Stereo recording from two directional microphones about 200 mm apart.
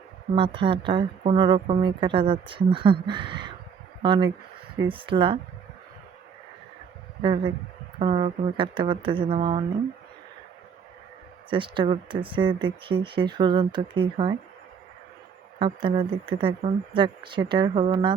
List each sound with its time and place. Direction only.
0.3 s speech: 25° right (ahead or behind)
7.2 s speech: 25° right (ahead or behind)
11.5 s speech: 25° right (ahead or behind)
15.5 s speech: 25° right (ahead or behind)